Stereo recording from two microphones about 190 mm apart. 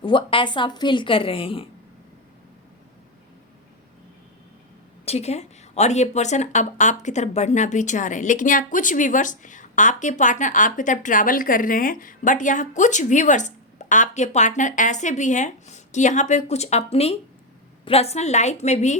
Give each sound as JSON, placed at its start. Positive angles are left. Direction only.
{"t": 0.0, "sound": "a woman's voice", "side_deg": 25}
{"t": 5.0, "sound": "speech", "side_deg": 35}